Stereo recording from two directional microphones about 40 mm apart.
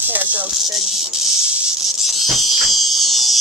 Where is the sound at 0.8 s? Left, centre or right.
Centre.